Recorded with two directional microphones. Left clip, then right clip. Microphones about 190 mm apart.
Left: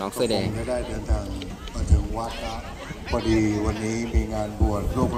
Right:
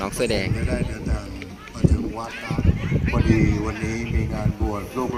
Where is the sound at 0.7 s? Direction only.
55° left (ahead or behind).